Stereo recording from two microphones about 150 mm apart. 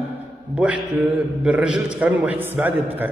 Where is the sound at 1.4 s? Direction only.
5° right (ahead or behind).